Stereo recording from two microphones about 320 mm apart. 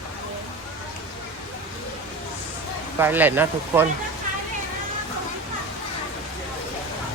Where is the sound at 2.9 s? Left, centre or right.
Centre.